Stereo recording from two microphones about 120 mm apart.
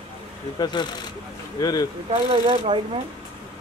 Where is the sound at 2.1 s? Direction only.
55° right (ahead or behind).